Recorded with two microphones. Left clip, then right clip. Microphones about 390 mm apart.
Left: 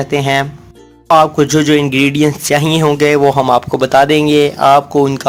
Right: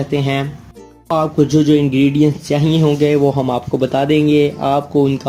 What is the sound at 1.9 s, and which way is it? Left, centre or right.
Speech, centre.